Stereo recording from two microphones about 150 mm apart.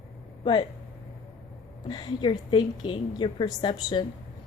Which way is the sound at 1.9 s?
35° left (ahead or behind).